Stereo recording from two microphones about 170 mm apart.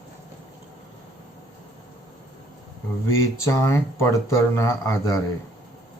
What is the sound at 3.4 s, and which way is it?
Speech, 15° left (ahead or behind).